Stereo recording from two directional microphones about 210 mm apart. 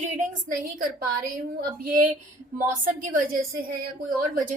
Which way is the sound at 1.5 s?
40° right (ahead or behind).